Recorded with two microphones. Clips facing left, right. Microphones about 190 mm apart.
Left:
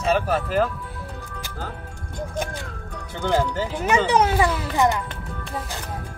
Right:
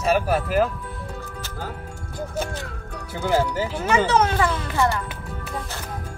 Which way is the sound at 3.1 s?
5° right (ahead or behind).